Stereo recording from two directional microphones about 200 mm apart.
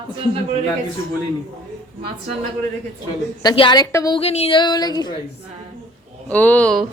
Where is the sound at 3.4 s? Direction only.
25° left (ahead or behind).